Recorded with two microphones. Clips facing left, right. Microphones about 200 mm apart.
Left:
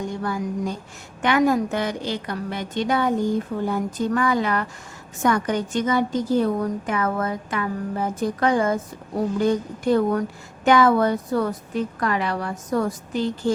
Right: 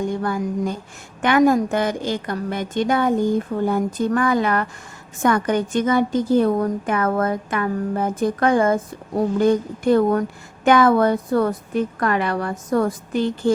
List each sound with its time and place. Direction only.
0.2 s a woman's voice: 55° right (ahead or behind)